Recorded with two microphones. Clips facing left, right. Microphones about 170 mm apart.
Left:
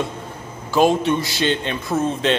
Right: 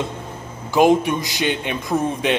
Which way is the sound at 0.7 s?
15° right (ahead or behind).